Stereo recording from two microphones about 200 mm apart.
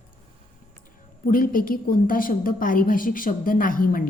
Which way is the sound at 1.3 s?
45° left (ahead or behind).